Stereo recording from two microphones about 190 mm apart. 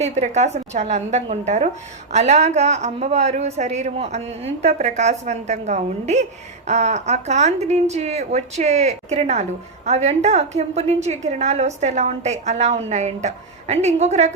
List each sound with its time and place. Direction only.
0.0 s speech: 35° right (ahead or behind)